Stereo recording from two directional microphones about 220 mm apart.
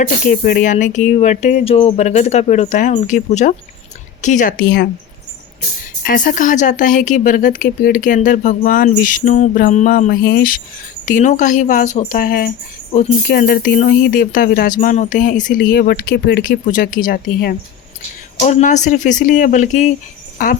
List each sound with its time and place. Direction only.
0.3 s speech: 40° left (ahead or behind)
6.1 s speech: 35° left (ahead or behind)
18.3 s speech: 30° left (ahead or behind)